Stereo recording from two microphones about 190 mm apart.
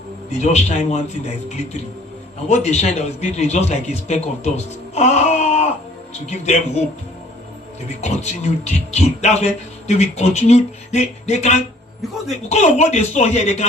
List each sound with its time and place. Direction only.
0.3 s a man's voice: 35° left (ahead or behind)
8.0 s a man's voice: 35° left (ahead or behind)